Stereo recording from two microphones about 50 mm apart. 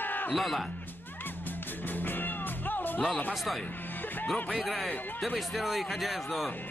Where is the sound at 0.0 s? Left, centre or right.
Left.